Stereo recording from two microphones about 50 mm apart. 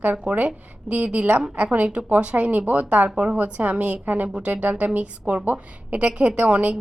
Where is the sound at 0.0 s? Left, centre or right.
Right.